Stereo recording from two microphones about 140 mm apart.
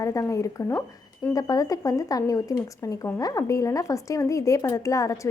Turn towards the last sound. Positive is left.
turn(degrees=25)  # may be behind; listen again after turning